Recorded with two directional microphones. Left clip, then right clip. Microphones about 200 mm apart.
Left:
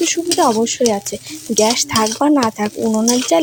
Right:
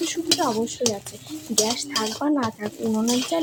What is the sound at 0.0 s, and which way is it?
A woman's voice, 30° left (ahead or behind).